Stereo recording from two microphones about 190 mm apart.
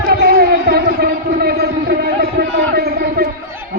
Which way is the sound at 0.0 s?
55° right (ahead or behind).